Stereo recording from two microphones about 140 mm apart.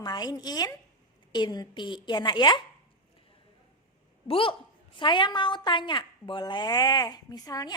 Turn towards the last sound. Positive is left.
turn(degrees=25)  # may be behind; listen again after turning